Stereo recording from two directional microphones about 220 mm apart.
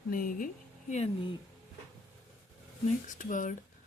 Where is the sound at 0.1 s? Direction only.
40° left (ahead or behind).